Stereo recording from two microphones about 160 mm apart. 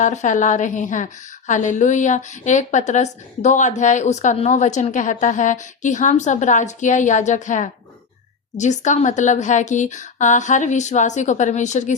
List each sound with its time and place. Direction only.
0.0 s a woman's voice: 50° left (ahead or behind)